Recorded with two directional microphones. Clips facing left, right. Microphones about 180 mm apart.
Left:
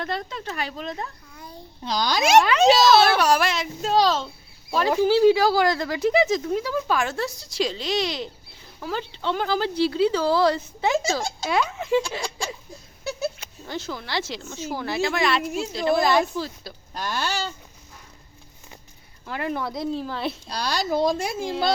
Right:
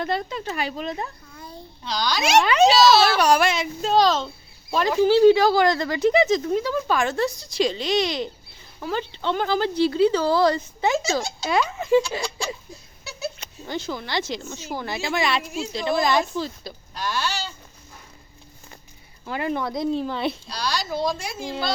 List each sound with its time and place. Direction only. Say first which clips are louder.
0.0 s speech: right 3 dB; centre (ahead or behind)
1.3 s babbling: right 2 dB; 15° left (ahead or behind)
1.8 s speech: left 2 dB; 50° left (ahead or behind)
2.4 s speech: right 2 dB; centre (ahead or behind)
2.9 s speech: left 1 dB; 55° left (ahead or behind)
3.2 s speech: right 2 dB; centre (ahead or behind)
11.2 s speech: even; 50° left (ahead or behind)
11.4 s speech: right 1 dB; 5° left (ahead or behind)
13.1 s goat: left 4 dB; 50° left (ahead or behind)
13.4 s speech: right 2 dB; centre (ahead or behind)
16.9 s speech: even; 50° left (ahead or behind)
19.2 s speech: right 2 dB; centre (ahead or behind)
20.5 s speech: left 2 dB; 55° left (ahead or behind)